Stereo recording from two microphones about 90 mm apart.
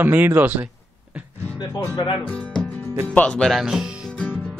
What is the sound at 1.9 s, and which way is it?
Speech, 65° left (ahead or behind).